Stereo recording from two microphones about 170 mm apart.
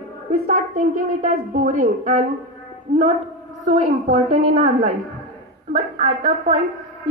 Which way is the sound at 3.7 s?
45° right (ahead or behind).